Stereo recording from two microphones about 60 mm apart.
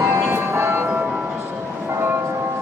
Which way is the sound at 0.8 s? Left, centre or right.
Right.